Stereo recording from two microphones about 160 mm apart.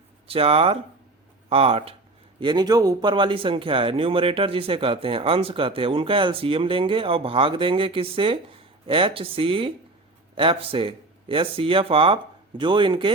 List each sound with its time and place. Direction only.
0.3 s a man's voice: 35° right (ahead or behind)